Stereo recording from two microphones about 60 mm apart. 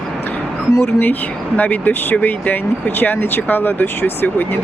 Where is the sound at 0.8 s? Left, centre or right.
Left.